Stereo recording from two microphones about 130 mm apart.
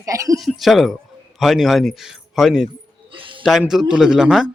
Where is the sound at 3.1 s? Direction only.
40° right (ahead or behind).